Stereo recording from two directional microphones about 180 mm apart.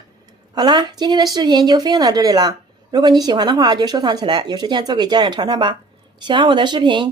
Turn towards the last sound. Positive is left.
turn(degrees=-25)  # may be behind; listen again after turning